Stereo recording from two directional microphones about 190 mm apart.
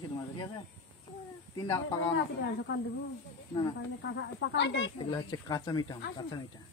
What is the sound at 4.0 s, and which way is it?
Speech, 75° left (ahead or behind).